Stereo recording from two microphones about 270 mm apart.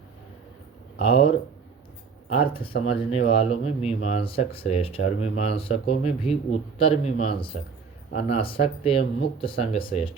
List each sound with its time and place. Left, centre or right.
0.9 s speech: left
2.4 s speech: centre